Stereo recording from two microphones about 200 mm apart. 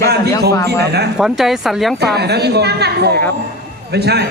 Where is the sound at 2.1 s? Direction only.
55° right (ahead or behind).